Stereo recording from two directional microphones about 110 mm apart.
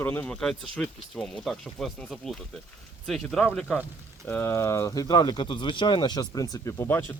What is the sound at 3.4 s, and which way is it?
Speech, 10° left (ahead or behind).